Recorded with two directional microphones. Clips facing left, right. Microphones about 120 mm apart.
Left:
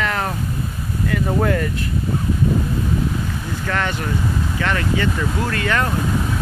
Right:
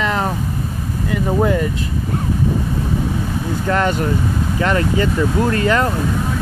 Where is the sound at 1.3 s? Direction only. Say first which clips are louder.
Right 4 dB; 15° right (ahead or behind).